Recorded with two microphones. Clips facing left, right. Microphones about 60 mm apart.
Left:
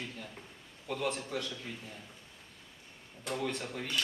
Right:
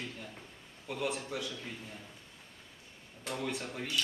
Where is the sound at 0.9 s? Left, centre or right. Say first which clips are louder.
Left 1 dB; centre.